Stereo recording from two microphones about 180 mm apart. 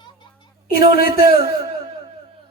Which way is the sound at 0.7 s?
55° left (ahead or behind).